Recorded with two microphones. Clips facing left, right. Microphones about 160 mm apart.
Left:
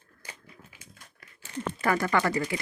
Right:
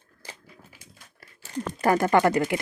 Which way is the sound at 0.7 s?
35° right (ahead or behind).